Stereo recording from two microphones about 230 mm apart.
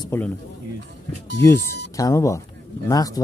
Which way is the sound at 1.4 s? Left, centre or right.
Centre.